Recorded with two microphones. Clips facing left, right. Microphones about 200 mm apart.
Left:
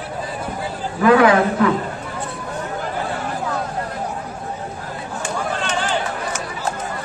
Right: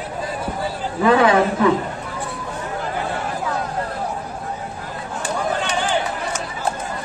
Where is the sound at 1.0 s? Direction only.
25° right (ahead or behind).